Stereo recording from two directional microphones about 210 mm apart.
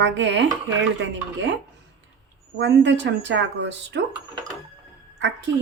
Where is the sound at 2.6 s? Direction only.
55° right (ahead or behind).